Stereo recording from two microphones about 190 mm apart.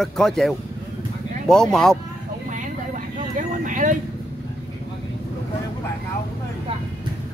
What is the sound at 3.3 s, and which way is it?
Speech, 40° right (ahead or behind).